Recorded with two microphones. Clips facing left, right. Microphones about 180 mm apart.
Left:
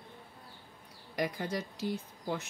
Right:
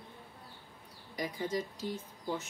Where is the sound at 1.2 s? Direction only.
65° left (ahead or behind).